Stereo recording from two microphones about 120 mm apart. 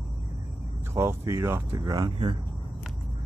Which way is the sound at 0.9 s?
25° right (ahead or behind).